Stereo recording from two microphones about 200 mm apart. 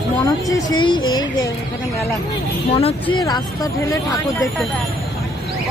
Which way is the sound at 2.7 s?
25° left (ahead or behind).